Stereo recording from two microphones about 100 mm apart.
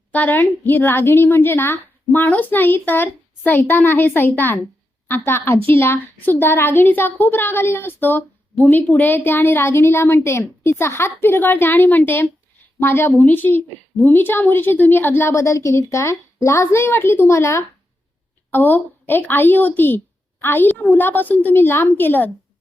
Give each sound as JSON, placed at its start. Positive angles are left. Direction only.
{"t": 0.1, "sound": "a woman's voice", "side_deg": 15}